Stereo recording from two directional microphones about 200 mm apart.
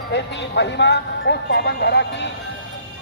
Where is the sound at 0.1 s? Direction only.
60° left (ahead or behind).